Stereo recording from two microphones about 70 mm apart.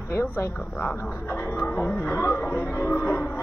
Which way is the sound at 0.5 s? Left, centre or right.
Centre.